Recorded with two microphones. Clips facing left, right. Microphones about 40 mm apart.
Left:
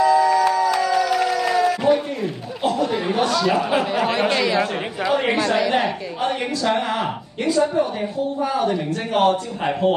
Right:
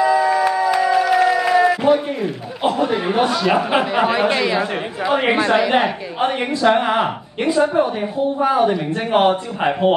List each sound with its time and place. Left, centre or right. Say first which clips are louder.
0.0 s a sound: even; right
2.6 s speech: right 3 dB; right
4.1 s speech: right 2 dB; centre